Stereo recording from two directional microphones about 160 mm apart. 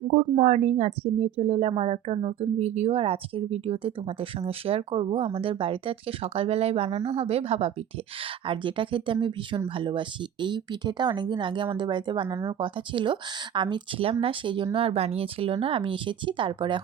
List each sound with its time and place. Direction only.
0.1 s speech: 50° right (ahead or behind); by 16.8 s 30° right (ahead or behind)